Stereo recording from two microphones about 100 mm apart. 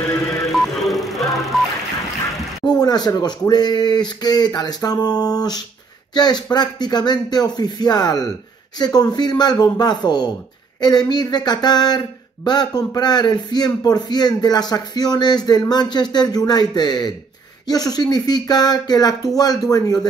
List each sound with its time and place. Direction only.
0.5 s music: centre (ahead or behind)
2.6 s a man's voice: 45° left (ahead or behind)